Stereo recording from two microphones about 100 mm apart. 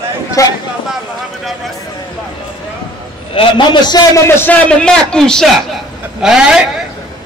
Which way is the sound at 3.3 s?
50° left (ahead or behind).